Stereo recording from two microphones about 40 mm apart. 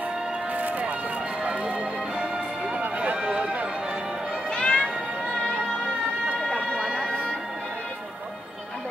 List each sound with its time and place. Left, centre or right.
0.6 s run: right
3.2 s run: right
4.6 s music: left